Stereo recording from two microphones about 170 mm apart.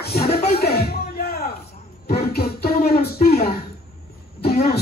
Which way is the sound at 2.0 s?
65° left (ahead or behind).